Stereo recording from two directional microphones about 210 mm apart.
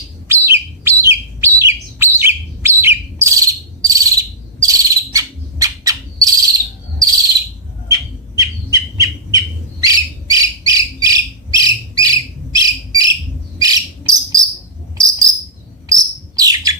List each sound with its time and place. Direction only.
0.3 s bird: 10° right (ahead or behind)
7.9 s bird: 15° right (ahead or behind)
13.6 s cricket: 15° right (ahead or behind)
14.9 s insect: 15° right (ahead or behind)
15.9 s bird: 15° right (ahead or behind)